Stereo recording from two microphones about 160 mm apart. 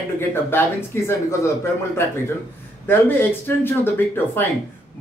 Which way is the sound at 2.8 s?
15° left (ahead or behind).